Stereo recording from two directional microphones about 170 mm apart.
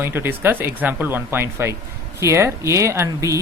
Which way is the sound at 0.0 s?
15° right (ahead or behind).